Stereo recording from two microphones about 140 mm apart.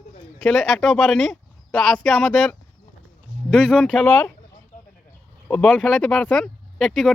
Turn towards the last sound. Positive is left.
turn(degrees=0)  # may be behind; listen again after turning